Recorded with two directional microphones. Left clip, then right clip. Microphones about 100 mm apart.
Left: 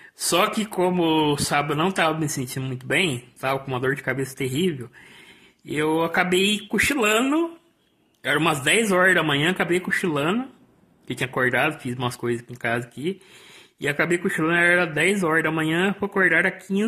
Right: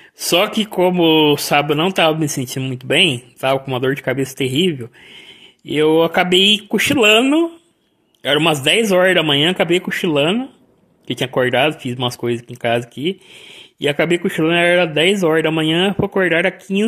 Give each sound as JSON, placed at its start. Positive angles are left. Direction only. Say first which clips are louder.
{"t": 0.2, "sound": "speech", "louder": "right 6 dB", "side_deg": -25}